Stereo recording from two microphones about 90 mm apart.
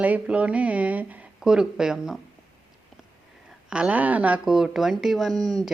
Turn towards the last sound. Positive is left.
turn(degrees=0)  # may be behind; listen again after turning